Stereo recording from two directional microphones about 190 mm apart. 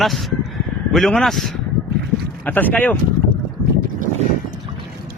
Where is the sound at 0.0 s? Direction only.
Centre (ahead or behind).